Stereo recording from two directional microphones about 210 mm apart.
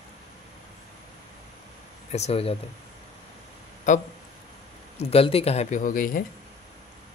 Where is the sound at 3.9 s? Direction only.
35° left (ahead or behind).